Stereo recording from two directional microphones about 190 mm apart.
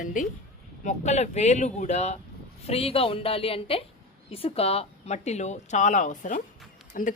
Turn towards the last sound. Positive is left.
turn(degrees=45)  # may be behind; listen again after turning